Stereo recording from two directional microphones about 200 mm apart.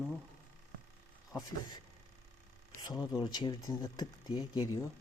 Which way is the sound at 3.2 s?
20° left (ahead or behind).